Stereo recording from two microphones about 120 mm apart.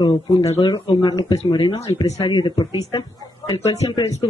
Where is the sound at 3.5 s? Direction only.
60° left (ahead or behind).